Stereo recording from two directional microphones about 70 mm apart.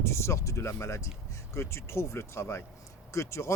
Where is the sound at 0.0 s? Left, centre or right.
Left.